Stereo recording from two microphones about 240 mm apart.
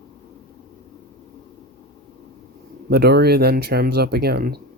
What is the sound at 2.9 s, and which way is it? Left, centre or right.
Speech, right.